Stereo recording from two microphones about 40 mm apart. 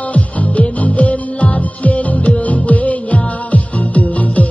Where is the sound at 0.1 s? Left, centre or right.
Left.